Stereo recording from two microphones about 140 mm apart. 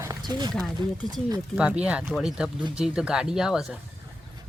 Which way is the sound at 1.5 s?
10° right (ahead or behind).